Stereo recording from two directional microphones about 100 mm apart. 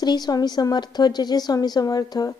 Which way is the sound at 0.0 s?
45° left (ahead or behind).